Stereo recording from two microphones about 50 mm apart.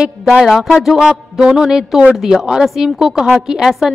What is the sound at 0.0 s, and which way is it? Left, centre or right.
A woman's voice, centre.